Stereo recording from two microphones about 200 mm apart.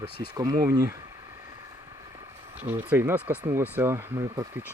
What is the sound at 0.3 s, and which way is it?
Speech, 20° right (ahead or behind).